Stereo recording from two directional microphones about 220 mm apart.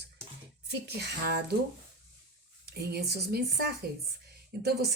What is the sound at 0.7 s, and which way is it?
Speech, 50° right (ahead or behind).